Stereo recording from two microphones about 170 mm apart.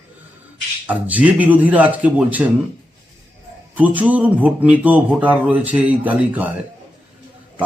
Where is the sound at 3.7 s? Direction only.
10° right (ahead or behind).